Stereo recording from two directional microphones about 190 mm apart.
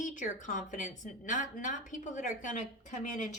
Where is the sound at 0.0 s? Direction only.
40° left (ahead or behind).